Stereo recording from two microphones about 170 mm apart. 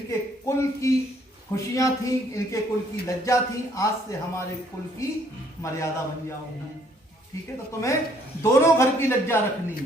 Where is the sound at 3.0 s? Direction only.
20° left (ahead or behind).